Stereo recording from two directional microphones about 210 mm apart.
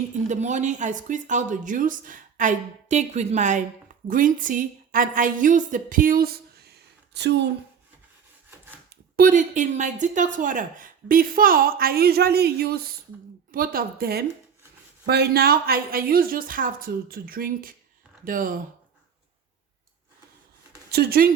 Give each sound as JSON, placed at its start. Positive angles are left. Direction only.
{"t": 0.3, "sound": "a woman's voice", "side_deg": -35}
{"t": 9.1, "sound": "a woman's voice", "side_deg": -40}
{"t": 20.9, "sound": "a woman's voice", "side_deg": -45}